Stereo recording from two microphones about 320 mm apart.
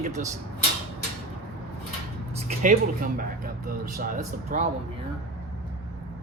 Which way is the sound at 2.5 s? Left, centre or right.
Right.